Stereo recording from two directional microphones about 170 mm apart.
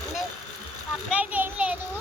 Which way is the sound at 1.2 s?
10° right (ahead or behind).